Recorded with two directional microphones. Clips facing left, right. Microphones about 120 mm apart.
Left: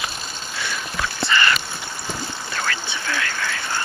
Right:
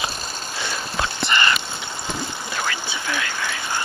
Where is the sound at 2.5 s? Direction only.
15° right (ahead or behind).